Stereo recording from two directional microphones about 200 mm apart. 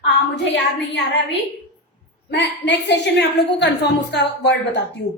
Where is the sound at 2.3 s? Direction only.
55° left (ahead or behind).